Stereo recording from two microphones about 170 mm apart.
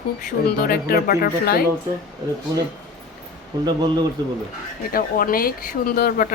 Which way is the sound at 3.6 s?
25° right (ahead or behind).